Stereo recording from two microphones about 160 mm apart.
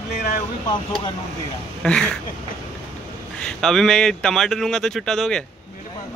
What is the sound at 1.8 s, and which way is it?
Speech, 5° left (ahead or behind).